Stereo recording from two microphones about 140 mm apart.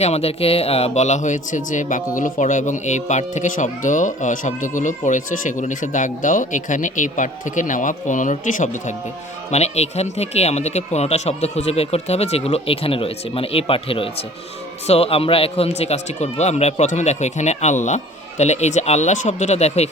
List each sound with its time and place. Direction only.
0.0 s speech: 50° left (ahead or behind); by 9.0 s 65° left (ahead or behind)
9.5 s a man's voice: 50° left (ahead or behind)